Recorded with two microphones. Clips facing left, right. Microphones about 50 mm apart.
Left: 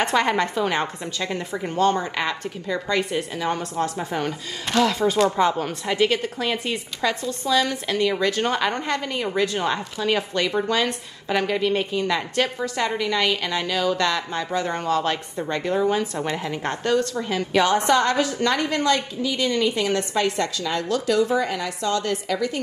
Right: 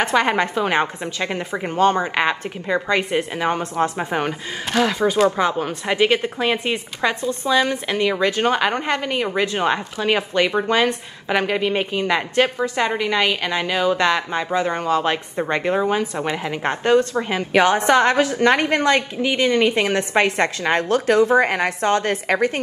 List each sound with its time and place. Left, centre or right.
0.0 s a woman's voice: right